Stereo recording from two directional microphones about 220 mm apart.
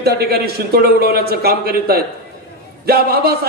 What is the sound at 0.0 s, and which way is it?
A man's voice, 45° right (ahead or behind).